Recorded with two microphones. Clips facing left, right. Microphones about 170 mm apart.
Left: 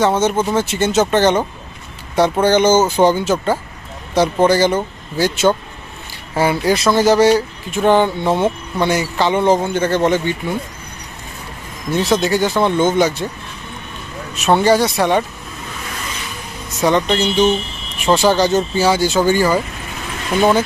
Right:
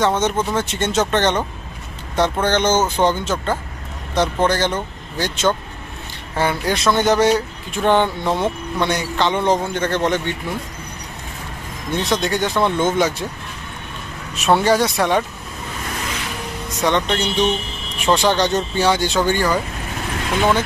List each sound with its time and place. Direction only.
0.0 s speech: 5° left (ahead or behind)
11.9 s speech: 5° left (ahead or behind)
14.3 s speech: centre (ahead or behind)
16.6 s speech: 5° left (ahead or behind)